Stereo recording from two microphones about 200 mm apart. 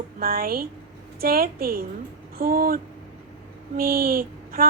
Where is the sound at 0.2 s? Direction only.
45° right (ahead or behind).